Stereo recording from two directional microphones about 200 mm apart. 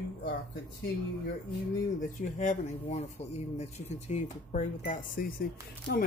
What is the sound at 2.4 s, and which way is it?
Speech, 35° left (ahead or behind).